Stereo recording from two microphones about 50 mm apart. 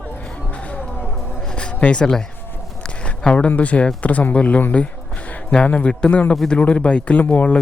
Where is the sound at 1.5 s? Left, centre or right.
Left.